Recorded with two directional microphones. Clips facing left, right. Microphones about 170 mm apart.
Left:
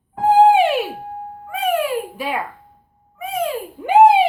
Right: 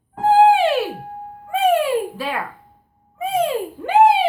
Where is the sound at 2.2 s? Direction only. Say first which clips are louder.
Left 1 dB; 15° left (ahead or behind).